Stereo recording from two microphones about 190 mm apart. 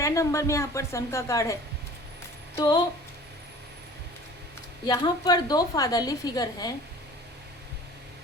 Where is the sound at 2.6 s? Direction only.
20° left (ahead or behind).